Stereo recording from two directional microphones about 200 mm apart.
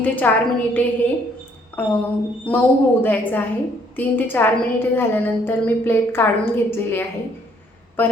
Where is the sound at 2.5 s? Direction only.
5° left (ahead or behind).